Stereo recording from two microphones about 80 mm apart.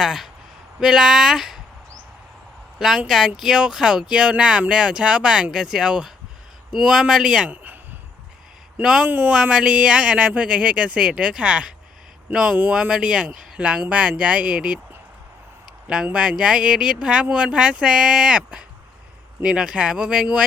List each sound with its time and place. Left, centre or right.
0.0 s speech: centre
2.7 s speech: centre
7.5 s a sound: centre
8.8 s speech: centre
9.0 s speech: centre
16.1 s speech: centre